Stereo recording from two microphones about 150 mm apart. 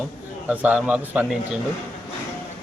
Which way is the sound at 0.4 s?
10° right (ahead or behind).